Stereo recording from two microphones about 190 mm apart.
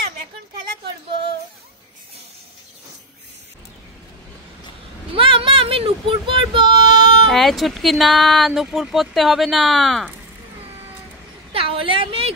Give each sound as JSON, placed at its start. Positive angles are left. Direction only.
{"t": 5.1, "sound": "child singing", "side_deg": -30}
{"t": 7.2, "sound": "speech", "side_deg": 0}
{"t": 11.5, "sound": "a sound", "side_deg": -30}